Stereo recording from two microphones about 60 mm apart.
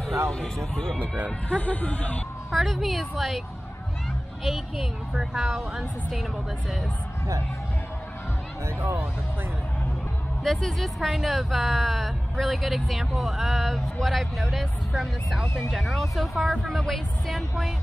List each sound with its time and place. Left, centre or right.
0.3 s speech: centre
1.5 s speech: left
2.5 s speech: centre
4.5 s speech: centre
10.4 s speech: centre